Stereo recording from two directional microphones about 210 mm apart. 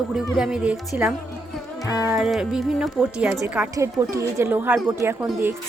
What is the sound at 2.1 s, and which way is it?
A woman's voice, centre (ahead or behind).